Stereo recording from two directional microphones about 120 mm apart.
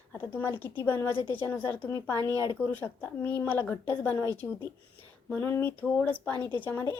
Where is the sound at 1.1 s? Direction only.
45° left (ahead or behind).